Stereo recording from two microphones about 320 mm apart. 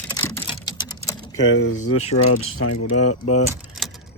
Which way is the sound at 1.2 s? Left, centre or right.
Left.